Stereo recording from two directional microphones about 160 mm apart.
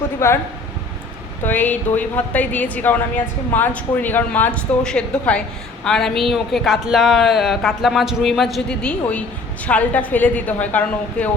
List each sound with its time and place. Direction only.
0.2 s speech: 15° left (ahead or behind)
1.5 s a woman's voice: 10° left (ahead or behind)